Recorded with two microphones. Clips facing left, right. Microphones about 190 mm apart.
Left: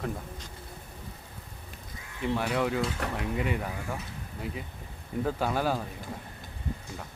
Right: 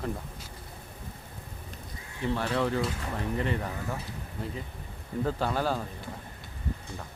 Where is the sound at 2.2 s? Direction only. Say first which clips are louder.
Even; 10° left (ahead or behind).